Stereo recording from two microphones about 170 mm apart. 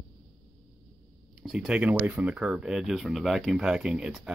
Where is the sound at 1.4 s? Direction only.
Centre (ahead or behind).